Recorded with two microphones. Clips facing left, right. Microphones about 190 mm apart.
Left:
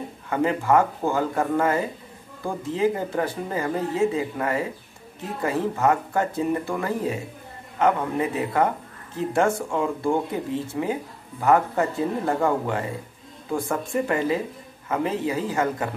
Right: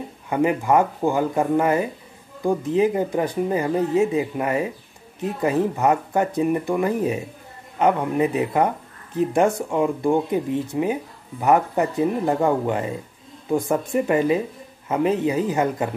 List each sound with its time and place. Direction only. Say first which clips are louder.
0.3 s speech: right 2 dB; 15° right (ahead or behind)